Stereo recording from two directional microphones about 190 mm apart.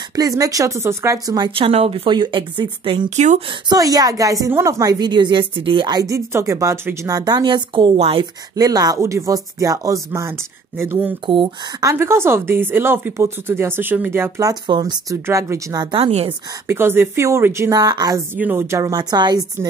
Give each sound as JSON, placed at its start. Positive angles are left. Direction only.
{"t": 0.1, "sound": "a woman's voice", "side_deg": -20}
{"t": 3.6, "sound": "a woman's voice", "side_deg": -20}
{"t": 11.2, "sound": "a woman's voice", "side_deg": -25}
{"t": 16.6, "sound": "a woman's voice", "side_deg": -10}